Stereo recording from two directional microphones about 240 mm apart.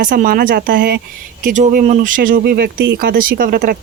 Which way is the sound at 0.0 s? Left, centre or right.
Right.